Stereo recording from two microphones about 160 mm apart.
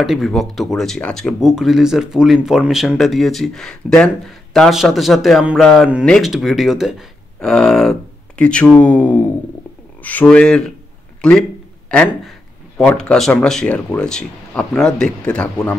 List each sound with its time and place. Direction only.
0.0 s speech: centre (ahead or behind)